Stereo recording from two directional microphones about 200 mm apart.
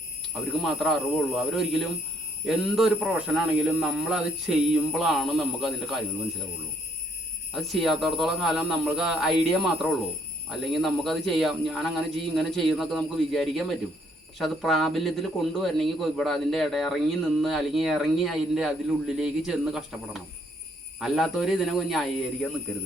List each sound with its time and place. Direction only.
0.6 s a man's voice: centre (ahead or behind)
7.5 s a man's voice: centre (ahead or behind)
21.0 s a man's voice: centre (ahead or behind)